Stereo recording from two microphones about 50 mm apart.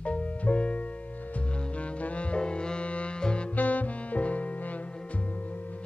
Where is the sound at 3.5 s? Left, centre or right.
Left.